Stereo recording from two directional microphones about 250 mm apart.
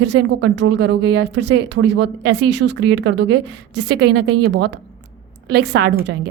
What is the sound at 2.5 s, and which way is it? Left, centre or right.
Speech, right.